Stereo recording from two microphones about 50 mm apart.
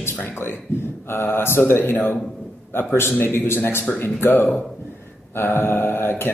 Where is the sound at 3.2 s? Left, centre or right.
Left.